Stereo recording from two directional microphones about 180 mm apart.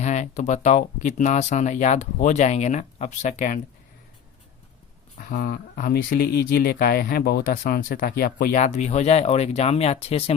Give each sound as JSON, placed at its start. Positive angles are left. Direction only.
{"t": 0.0, "sound": "speech", "side_deg": 40}
{"t": 5.1, "sound": "speech", "side_deg": 55}